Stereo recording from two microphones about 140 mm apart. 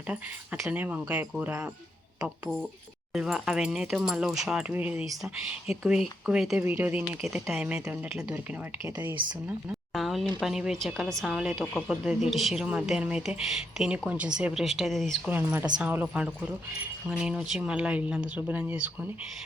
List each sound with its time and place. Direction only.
0.6 s speech: 10° right (ahead or behind)
3.1 s speech: centre (ahead or behind)
6.2 s speech: 5° right (ahead or behind)
9.2 s speech: 35° right (ahead or behind)
9.9 s speech: centre (ahead or behind)
15.3 s speech: 15° right (ahead or behind)